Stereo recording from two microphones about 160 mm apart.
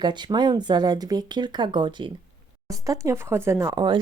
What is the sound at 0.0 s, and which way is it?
Speech, 25° right (ahead or behind).